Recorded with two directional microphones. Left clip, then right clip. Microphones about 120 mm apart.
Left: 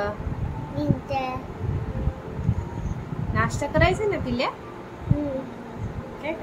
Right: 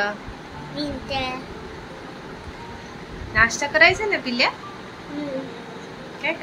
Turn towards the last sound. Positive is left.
turn(degrees=20)  # may be behind; listen again after turning